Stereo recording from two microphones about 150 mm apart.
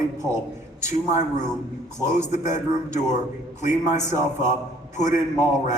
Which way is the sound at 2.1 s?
55° left (ahead or behind).